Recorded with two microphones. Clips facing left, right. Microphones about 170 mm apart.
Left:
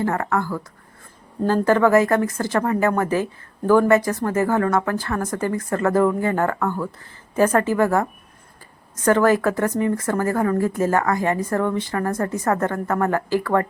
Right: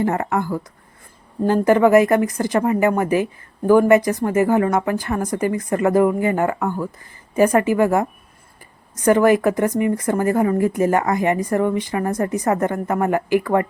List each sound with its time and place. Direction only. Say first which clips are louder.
0.0 s speech: right 2 dB; 20° right (ahead or behind)